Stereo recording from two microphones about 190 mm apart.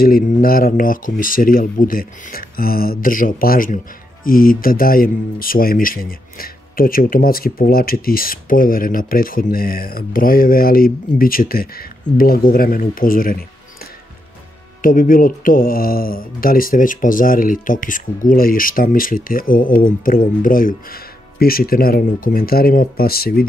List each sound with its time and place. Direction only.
0.0 s speech: 50° left (ahead or behind)
14.8 s speech: 45° left (ahead or behind)